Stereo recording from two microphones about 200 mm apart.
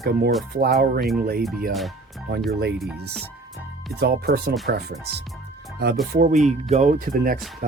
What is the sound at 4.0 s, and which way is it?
Speech, 55° right (ahead or behind).